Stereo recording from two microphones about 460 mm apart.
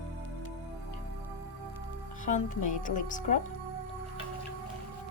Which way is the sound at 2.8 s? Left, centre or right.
Centre.